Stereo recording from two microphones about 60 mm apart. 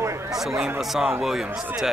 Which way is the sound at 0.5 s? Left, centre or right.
Centre.